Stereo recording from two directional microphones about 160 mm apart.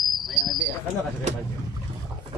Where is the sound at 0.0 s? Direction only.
Centre (ahead or behind).